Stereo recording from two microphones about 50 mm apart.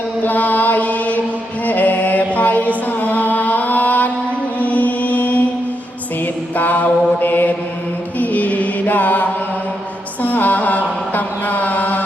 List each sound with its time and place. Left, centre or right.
0.3 s chant: left
1.6 s mantra: left
6.6 s mantra: left
8.2 s chant: left
10.2 s mantra: left